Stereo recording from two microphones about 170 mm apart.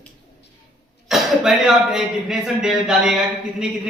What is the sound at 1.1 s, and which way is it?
Speech, centre (ahead or behind).